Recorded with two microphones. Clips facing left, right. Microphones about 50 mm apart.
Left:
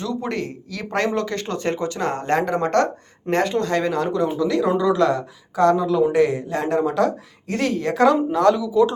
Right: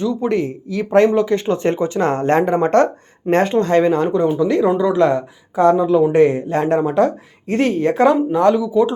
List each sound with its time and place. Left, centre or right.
0.0 s speech: centre